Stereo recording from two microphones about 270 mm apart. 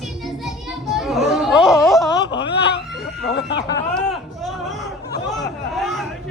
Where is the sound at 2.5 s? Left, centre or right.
Left.